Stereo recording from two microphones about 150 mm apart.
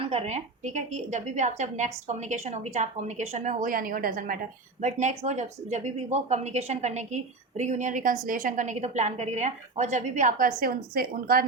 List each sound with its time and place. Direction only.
0.0 s speech: 45° right (ahead or behind); by 4.4 s 70° right (ahead or behind)
4.8 s speech: 55° right (ahead or behind)
10.6 s a woman's voice: 80° right